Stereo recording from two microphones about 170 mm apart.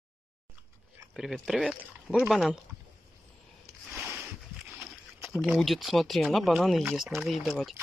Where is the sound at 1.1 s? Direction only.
Centre (ahead or behind).